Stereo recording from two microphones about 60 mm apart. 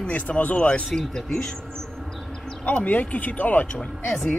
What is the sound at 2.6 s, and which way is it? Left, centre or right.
Speech, left.